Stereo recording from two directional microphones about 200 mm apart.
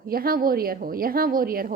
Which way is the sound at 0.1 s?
50° right (ahead or behind).